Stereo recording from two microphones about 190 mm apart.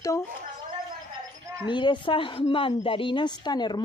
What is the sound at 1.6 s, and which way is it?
Speech, 25° left (ahead or behind).